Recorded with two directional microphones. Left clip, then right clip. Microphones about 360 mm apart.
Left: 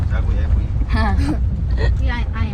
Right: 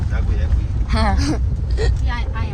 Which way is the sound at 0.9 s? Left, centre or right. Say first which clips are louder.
Right 2 dB; right.